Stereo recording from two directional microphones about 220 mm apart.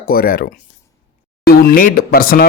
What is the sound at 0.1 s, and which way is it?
A man's voice, 45° left (ahead or behind).